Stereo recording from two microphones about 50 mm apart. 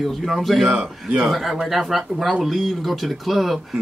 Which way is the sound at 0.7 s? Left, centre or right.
Right.